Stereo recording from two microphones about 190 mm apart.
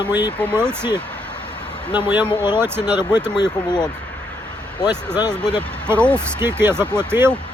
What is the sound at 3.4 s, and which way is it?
Speech, 20° left (ahead or behind).